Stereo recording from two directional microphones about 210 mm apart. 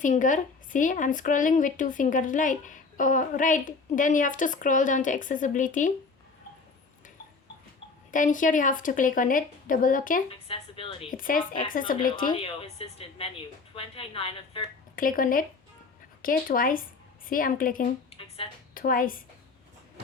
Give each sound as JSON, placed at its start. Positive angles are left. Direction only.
{"t": 0.0, "sound": "speech", "side_deg": 35}
{"t": 8.1, "sound": "speech", "side_deg": 40}
{"t": 10.2, "sound": "a woman's voice", "side_deg": 25}
{"t": 11.1, "sound": "speech", "side_deg": 40}
{"t": 12.3, "sound": "a woman's voice", "side_deg": 25}
{"t": 14.9, "sound": "speech", "side_deg": 40}
{"t": 18.1, "sound": "a sound", "side_deg": 25}
{"t": 18.7, "sound": "speech", "side_deg": 40}